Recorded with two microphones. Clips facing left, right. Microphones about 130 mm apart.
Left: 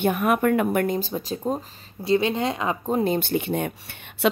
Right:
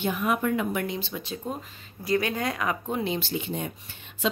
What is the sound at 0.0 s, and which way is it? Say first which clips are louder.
Speech: left 5 dB; 55° left (ahead or behind).